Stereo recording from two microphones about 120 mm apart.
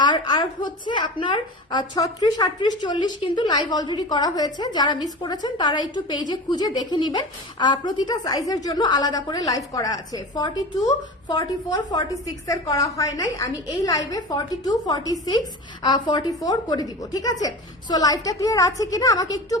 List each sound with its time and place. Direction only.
0.0 s a woman's voice: 35° left (ahead or behind)